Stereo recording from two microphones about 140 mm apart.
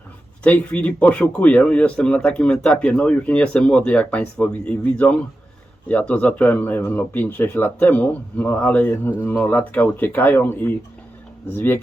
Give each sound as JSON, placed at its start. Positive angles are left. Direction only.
{"t": 0.4, "sound": "speech", "side_deg": 10}